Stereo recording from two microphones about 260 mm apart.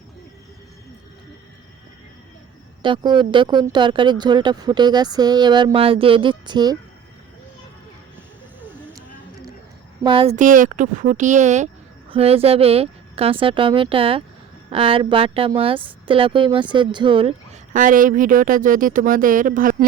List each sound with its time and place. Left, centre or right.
2.8 s speech: centre
10.0 s speech: centre